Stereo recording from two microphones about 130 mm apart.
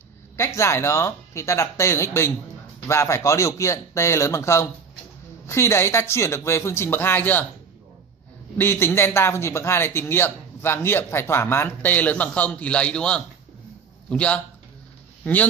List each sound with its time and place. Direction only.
0.4 s speech: 20° left (ahead or behind)
8.5 s a man's voice: 15° left (ahead or behind)